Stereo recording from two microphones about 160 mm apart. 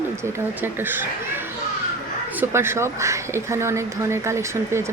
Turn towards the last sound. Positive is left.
turn(degrees=-15)  # may be behind; listen again after turning